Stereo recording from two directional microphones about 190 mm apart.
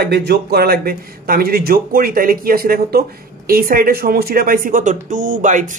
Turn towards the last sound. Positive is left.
turn(degrees=-40)  # may be behind; listen again after turning